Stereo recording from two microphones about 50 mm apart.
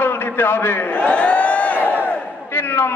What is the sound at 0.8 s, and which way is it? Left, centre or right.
Crowd, left.